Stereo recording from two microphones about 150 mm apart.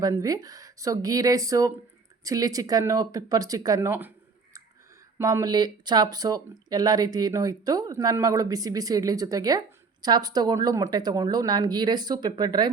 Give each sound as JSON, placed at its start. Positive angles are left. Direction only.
{"t": 0.0, "sound": "speech", "side_deg": -20}
{"t": 5.1, "sound": "speech", "side_deg": -20}